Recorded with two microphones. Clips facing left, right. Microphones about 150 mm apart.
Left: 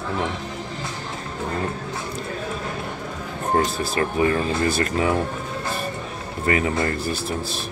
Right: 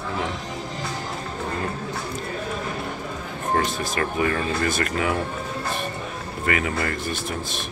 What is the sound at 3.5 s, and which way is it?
Speech, 35° left (ahead or behind).